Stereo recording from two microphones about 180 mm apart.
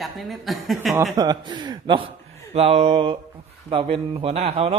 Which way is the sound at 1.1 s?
20° right (ahead or behind).